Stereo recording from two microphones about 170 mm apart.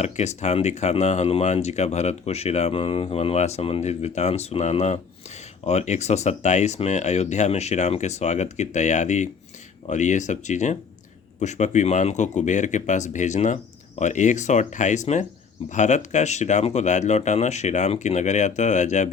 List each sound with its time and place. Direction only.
0.0 s speech: 40° left (ahead or behind)